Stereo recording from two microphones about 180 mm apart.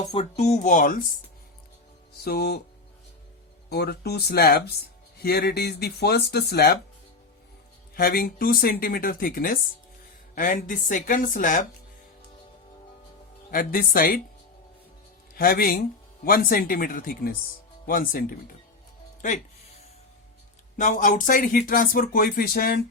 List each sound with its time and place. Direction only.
0.0 s speech: 35° left (ahead or behind)
2.2 s speech: 60° left (ahead or behind)
3.7 s speech: 60° left (ahead or behind)
7.9 s speech: 55° left (ahead or behind)
13.5 s speech: 55° left (ahead or behind)
15.4 s speech: 55° left (ahead or behind)
20.7 s speech: 45° left (ahead or behind)